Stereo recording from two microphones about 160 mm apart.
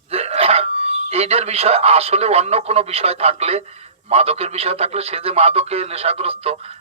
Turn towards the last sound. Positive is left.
turn(degrees=-40)  # may be behind; listen again after turning